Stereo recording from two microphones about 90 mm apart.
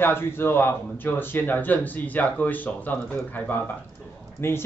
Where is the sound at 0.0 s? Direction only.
25° left (ahead or behind).